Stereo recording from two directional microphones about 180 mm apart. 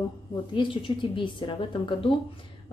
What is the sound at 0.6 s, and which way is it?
A woman's voice, 30° left (ahead or behind).